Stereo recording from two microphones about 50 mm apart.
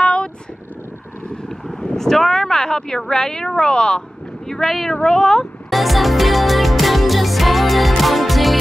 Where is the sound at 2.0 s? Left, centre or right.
Centre.